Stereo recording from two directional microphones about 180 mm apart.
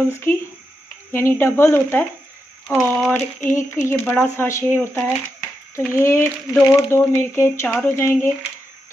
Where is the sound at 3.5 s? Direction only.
15° left (ahead or behind).